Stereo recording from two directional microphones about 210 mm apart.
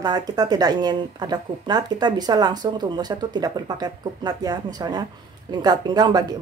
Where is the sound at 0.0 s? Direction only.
20° right (ahead or behind).